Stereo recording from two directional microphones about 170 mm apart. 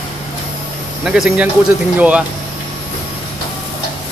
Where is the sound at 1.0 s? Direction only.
5° right (ahead or behind).